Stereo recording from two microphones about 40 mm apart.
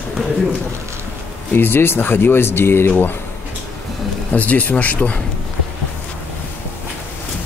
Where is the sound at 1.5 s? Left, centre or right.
Left.